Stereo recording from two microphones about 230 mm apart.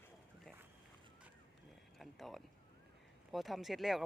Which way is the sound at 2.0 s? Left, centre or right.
Centre.